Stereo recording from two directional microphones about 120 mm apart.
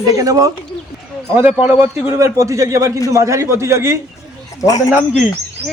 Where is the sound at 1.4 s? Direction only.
10° right (ahead or behind).